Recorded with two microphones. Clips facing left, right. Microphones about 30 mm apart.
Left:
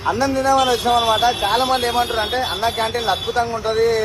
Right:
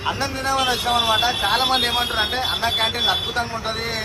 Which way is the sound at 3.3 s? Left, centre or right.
Right.